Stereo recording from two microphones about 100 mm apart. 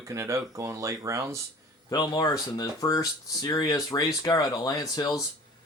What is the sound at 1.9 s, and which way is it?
Speech, 45° left (ahead or behind).